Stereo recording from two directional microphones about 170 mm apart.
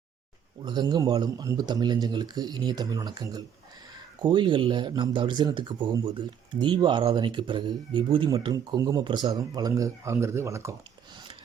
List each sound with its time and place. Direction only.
0.6 s speech: 25° right (ahead or behind)